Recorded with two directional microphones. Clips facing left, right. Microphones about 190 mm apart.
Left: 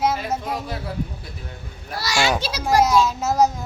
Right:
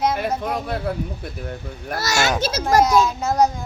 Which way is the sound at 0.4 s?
55° right (ahead or behind).